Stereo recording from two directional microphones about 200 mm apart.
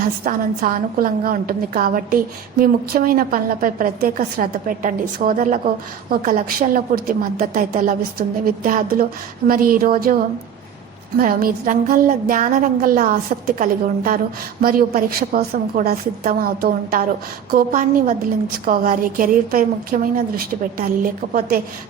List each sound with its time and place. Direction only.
0.0 s a woman's voice: 45° right (ahead or behind)
11.2 s a woman's voice: 45° right (ahead or behind)